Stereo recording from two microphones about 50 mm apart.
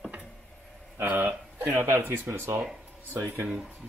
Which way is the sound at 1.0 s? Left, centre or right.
Right.